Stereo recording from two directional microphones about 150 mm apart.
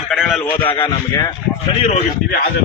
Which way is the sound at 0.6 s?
35° left (ahead or behind).